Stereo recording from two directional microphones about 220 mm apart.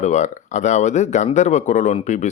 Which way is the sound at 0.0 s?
35° left (ahead or behind).